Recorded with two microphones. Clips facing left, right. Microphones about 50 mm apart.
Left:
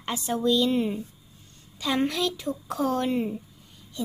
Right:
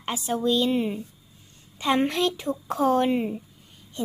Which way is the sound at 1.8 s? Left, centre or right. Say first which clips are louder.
Right 3 dB; right.